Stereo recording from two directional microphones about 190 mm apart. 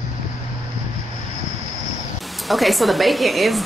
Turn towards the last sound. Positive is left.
turn(degrees=0)  # may be behind; listen again after turning